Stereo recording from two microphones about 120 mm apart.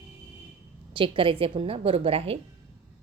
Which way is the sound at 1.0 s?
45° right (ahead or behind).